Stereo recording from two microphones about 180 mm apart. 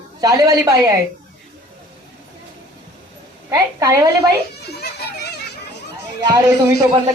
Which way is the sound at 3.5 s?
15° right (ahead or behind).